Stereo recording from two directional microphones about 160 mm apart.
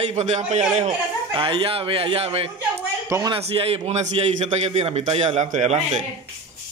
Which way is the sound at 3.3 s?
35° right (ahead or behind).